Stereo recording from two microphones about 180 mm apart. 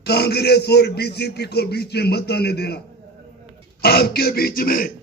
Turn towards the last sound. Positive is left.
turn(degrees=55)  # may be behind; listen again after turning